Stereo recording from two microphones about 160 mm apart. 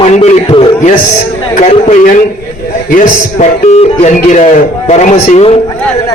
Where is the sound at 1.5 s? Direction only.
50° left (ahead or behind).